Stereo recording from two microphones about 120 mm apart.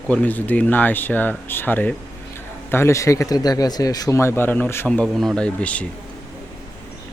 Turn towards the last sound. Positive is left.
turn(degrees=10)  # may be behind; listen again after turning